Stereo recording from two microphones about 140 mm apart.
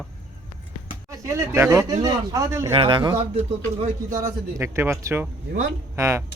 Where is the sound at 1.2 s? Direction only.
20° right (ahead or behind).